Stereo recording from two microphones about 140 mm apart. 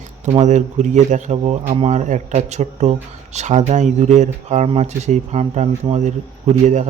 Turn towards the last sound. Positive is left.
turn(degrees=-55)  # may be behind; listen again after turning